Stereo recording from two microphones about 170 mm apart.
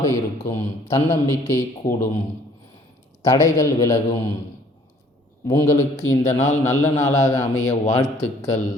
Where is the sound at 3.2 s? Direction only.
20° left (ahead or behind).